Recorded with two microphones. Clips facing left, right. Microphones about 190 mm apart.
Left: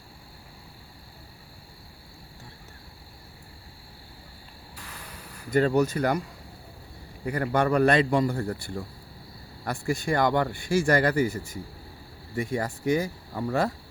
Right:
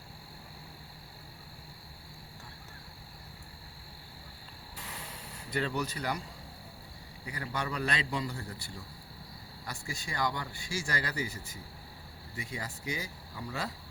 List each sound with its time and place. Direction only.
4.8 s a sound: 20° right (ahead or behind)
5.5 s a man's voice: 45° left (ahead or behind)
7.3 s a man's voice: 55° left (ahead or behind)